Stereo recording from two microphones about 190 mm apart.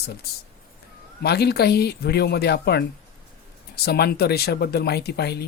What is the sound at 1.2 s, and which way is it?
Speech, 55° left (ahead or behind).